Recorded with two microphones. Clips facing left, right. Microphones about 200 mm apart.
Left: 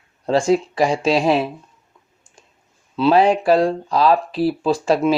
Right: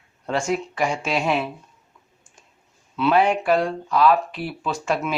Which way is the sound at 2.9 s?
30° left (ahead or behind).